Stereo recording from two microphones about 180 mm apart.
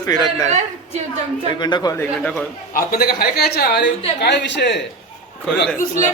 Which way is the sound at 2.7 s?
60° left (ahead or behind).